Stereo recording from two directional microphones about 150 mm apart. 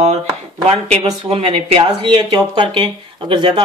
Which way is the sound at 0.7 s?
45° right (ahead or behind).